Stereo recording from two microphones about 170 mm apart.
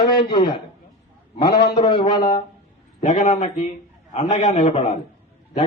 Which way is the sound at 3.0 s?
45° left (ahead or behind).